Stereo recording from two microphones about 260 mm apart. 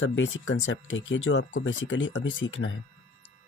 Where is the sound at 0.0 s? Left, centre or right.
Left.